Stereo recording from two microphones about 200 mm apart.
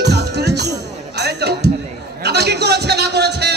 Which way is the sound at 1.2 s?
55° right (ahead or behind).